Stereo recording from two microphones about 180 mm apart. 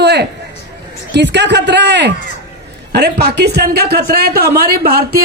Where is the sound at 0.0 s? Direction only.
70° right (ahead or behind).